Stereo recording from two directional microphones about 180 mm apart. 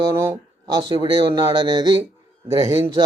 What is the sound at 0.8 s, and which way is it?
Speech, 25° right (ahead or behind).